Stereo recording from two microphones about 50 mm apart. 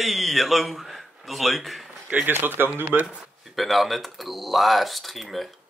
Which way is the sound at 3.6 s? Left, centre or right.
Centre.